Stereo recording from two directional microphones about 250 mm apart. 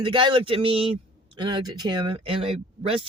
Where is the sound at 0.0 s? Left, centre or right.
Centre.